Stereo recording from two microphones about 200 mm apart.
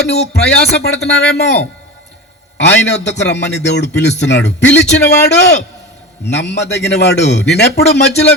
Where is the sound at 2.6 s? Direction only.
60° left (ahead or behind).